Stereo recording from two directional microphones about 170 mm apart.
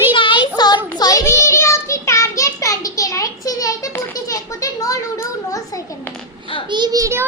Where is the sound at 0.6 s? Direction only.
25° left (ahead or behind).